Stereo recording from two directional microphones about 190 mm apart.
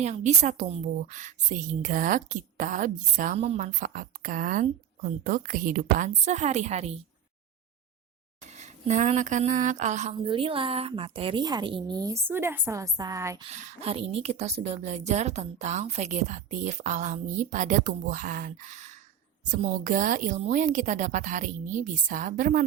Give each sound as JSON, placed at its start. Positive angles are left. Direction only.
{"t": 0.0, "sound": "a woman's voice", "side_deg": -35}
{"t": 8.5, "sound": "speech", "side_deg": -40}
{"t": 10.2, "sound": "a woman's voice", "side_deg": -25}
{"t": 13.4, "sound": "a woman's voice", "side_deg": -35}